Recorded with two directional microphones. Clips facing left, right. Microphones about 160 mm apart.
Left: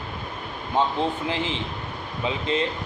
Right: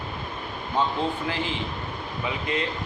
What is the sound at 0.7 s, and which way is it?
Speech, 20° left (ahead or behind).